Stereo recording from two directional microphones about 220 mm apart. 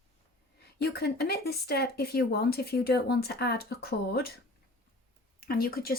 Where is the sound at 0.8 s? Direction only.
45° left (ahead or behind).